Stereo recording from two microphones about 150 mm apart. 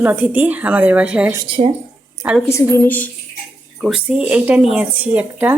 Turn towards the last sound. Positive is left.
turn(degrees=-10)  # may be behind; listen again after turning